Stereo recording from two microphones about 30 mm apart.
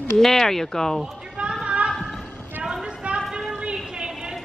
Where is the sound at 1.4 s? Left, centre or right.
Right.